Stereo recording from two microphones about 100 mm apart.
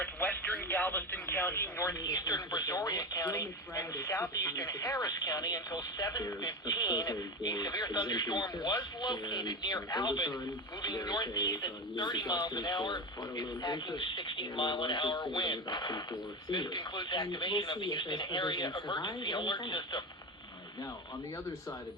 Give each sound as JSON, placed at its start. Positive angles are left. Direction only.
{"t": 0.0, "sound": "speech", "side_deg": 15}